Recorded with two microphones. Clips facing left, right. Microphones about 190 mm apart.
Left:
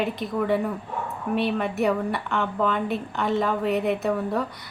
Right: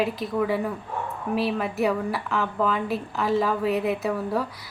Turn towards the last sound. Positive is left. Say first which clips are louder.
# left 1 dB
turn(degrees=0)  # may be behind; listen again after turning